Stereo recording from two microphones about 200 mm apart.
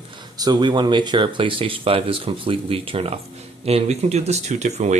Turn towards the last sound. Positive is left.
turn(degrees=-35)  # may be behind; listen again after turning